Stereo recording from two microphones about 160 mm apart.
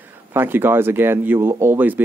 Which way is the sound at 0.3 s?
15° right (ahead or behind).